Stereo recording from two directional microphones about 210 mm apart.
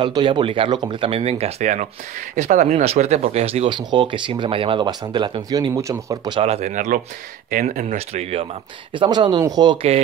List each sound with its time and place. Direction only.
0.0 s speech: 20° right (ahead or behind)